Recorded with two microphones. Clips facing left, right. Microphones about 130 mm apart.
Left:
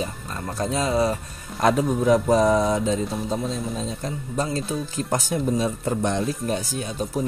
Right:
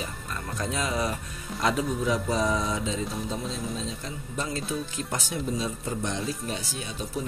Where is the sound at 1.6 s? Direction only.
50° left (ahead or behind).